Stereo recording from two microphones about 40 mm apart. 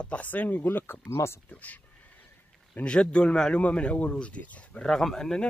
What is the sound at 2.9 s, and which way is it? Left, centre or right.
Speech, left.